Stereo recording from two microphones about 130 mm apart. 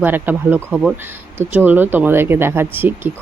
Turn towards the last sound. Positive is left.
turn(degrees=-15)  # may be behind; listen again after turning